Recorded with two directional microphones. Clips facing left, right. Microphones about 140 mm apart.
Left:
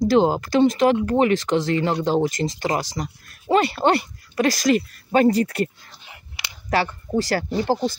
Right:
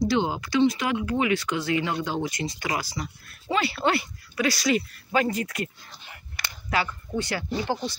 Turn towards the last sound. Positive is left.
turn(degrees=35)  # may be behind; listen again after turning